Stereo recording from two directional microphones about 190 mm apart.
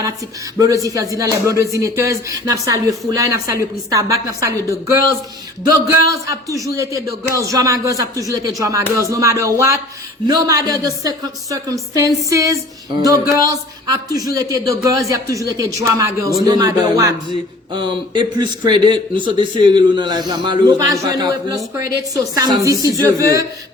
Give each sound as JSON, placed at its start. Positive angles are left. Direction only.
{"t": 0.6, "sound": "a man's voice", "side_deg": -15}